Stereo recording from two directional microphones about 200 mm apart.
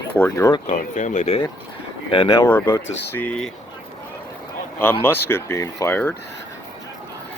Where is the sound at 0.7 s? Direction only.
35° left (ahead or behind).